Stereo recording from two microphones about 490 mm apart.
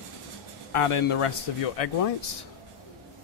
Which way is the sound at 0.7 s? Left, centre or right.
Left.